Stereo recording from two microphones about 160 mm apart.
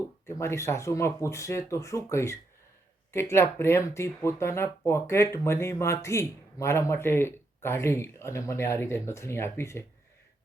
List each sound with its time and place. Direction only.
0.3 s speech: 15° left (ahead or behind)